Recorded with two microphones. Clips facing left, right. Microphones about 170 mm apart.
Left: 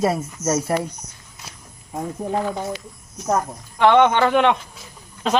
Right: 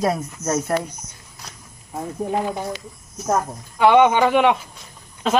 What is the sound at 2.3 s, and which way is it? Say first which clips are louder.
Speech: even; 15° right (ahead or behind).